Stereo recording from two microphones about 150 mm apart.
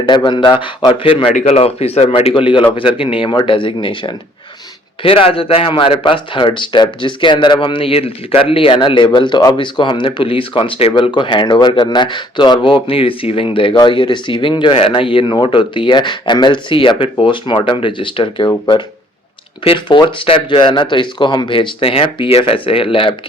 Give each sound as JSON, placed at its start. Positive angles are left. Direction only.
{"t": 0.2, "sound": "speech", "side_deg": 30}
{"t": 1.3, "sound": "speech", "side_deg": 50}
{"t": 19.6, "sound": "speech", "side_deg": 35}